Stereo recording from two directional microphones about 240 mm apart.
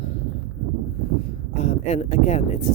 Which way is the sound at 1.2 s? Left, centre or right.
Left.